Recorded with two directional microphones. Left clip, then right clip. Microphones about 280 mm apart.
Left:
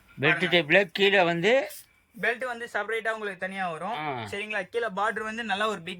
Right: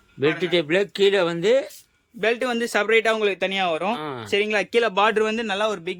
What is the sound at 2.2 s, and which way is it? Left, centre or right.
Speech, right.